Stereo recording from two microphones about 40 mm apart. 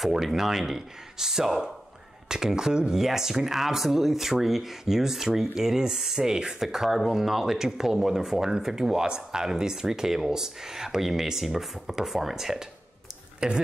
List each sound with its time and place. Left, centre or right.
0.0 s speech: centre
13.4 s speech: right